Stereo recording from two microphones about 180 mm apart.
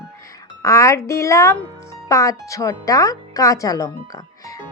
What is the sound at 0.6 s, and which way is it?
Speech, 15° left (ahead or behind).